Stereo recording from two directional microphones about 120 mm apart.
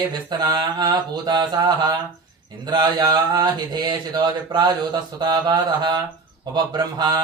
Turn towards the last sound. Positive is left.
turn(degrees=-35)  # may be behind; listen again after turning